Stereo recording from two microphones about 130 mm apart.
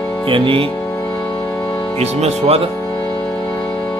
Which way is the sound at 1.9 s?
55° right (ahead or behind).